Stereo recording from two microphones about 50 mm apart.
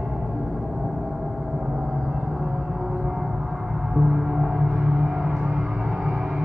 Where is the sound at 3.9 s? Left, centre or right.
Centre.